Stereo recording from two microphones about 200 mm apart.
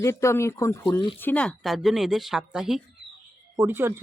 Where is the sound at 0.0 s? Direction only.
15° left (ahead or behind).